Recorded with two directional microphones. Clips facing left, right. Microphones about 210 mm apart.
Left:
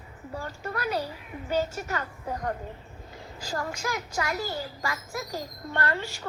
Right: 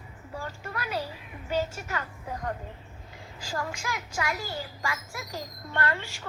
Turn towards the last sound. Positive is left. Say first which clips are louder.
# left 1 dB
turn(degrees=40)  # may be behind; listen again after turning